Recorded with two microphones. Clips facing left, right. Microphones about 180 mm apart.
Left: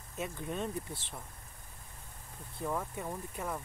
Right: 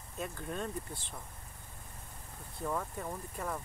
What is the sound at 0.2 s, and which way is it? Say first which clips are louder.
Speech: left 2 dB; 5° left (ahead or behind).